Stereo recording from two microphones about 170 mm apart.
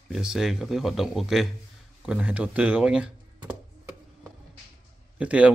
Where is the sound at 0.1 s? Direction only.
5° right (ahead or behind).